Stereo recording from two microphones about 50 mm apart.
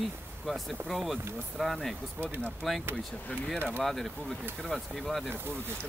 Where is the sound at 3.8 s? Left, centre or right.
Centre.